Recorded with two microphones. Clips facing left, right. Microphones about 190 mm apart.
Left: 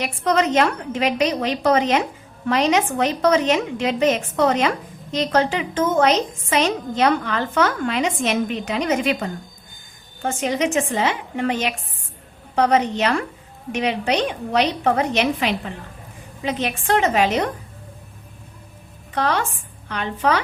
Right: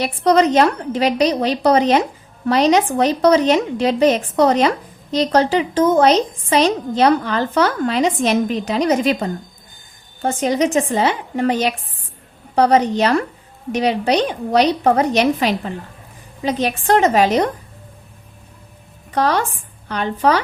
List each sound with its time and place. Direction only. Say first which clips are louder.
0.0 s a woman's voice: right 5 dB; 35° right (ahead or behind)
19.1 s a woman's voice: right 4 dB; 40° right (ahead or behind)